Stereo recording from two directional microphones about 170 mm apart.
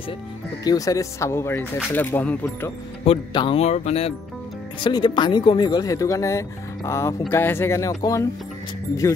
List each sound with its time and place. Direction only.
0.7 s speech: 20° left (ahead or behind)
3.1 s speech: 35° left (ahead or behind)
4.7 s speech: 30° left (ahead or behind)